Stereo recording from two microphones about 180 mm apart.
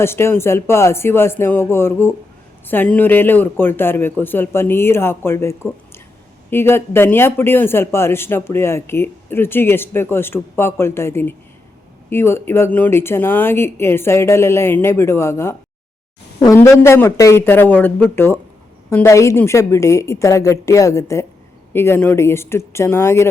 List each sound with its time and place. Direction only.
0.0 s a man's voice: 15° left (ahead or behind)
16.6 s a man's voice: 15° left (ahead or behind)